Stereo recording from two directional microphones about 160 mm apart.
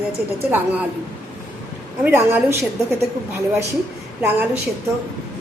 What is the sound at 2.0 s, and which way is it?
A woman's voice, 15° right (ahead or behind).